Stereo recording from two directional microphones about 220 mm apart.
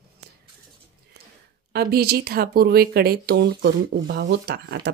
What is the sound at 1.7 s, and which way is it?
Speech, 45° right (ahead or behind).